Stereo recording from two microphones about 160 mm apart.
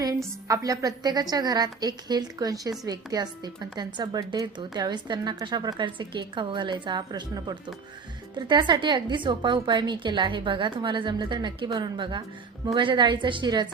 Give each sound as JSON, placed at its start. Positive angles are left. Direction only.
{"t": 0.4, "sound": "a woman's voice", "side_deg": -20}